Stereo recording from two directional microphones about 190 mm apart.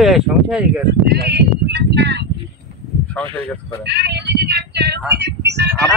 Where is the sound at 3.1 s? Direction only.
10° left (ahead or behind).